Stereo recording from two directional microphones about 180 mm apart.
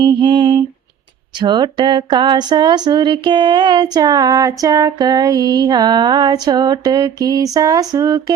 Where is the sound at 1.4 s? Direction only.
25° right (ahead or behind).